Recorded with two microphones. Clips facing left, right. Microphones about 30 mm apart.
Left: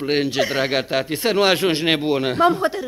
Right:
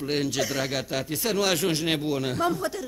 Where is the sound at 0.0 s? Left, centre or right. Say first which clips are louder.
Left 7 dB; left.